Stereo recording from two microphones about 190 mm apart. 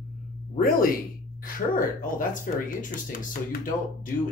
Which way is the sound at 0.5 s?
50° left (ahead or behind).